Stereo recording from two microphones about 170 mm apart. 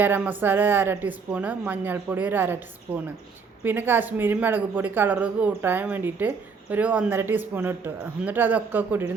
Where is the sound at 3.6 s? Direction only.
10° right (ahead or behind).